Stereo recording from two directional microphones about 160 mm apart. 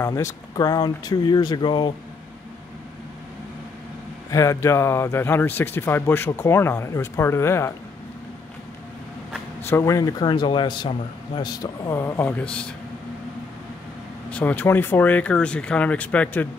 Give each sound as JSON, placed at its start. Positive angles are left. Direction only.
{"t": 0.0, "sound": "a man's voice", "side_deg": 20}
{"t": 4.3, "sound": "speech", "side_deg": 20}
{"t": 9.7, "sound": "a man's voice", "side_deg": 20}
{"t": 14.3, "sound": "speech", "side_deg": 10}